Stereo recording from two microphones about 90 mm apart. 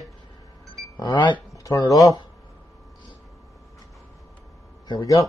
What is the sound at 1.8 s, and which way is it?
Speech, 40° left (ahead or behind).